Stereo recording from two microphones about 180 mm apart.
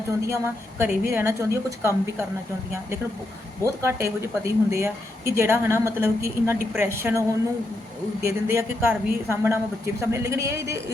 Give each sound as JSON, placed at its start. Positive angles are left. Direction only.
{"t": 0.2, "sound": "a woman's voice", "side_deg": -15}
{"t": 3.6, "sound": "a woman's voice", "side_deg": -15}